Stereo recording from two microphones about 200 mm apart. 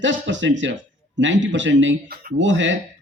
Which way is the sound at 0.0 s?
65° right (ahead or behind).